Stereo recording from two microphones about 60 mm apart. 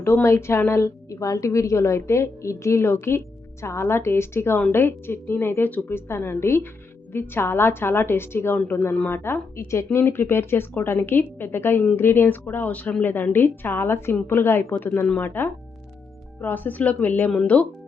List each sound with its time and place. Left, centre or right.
0.0 s a woman's voice: left
9.6 s a woman's voice: left